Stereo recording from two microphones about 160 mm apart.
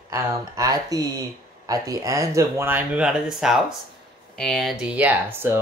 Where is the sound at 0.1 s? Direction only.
20° right (ahead or behind).